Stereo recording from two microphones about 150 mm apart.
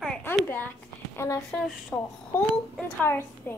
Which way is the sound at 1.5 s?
Centre (ahead or behind).